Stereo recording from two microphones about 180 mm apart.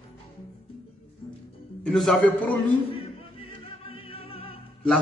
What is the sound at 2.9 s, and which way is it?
Music, 30° left (ahead or behind).